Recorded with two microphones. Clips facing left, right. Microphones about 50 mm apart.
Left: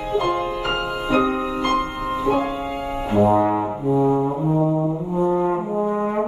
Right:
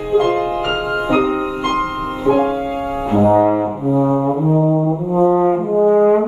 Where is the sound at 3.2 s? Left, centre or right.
Centre.